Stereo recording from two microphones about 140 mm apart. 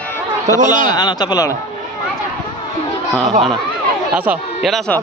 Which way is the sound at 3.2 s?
50° right (ahead or behind).